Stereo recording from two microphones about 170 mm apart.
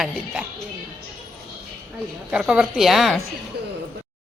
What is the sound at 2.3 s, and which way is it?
Speech, 5° right (ahead or behind).